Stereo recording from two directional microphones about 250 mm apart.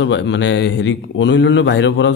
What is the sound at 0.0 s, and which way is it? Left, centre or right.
Speech, left.